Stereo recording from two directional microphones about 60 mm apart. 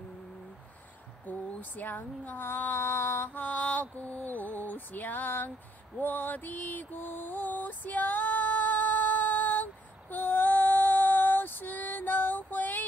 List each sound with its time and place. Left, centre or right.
1.2 s speech: left
5.9 s mantra: left